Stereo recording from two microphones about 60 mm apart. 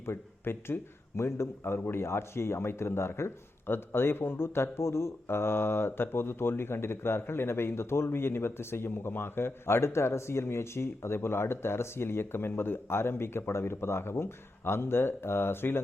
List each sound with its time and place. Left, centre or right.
0.0 s a man's voice: left